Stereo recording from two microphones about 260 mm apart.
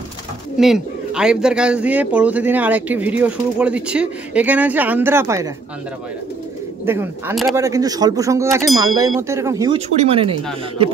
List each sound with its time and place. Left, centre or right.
0.6 s a man's voice: centre
6.9 s speech: centre
9.8 s speech: right